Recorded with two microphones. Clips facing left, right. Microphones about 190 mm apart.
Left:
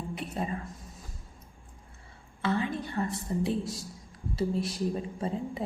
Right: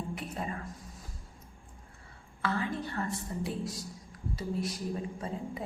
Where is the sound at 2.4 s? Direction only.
20° left (ahead or behind).